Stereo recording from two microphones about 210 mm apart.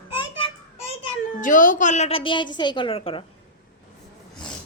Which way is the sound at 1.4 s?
40° left (ahead or behind).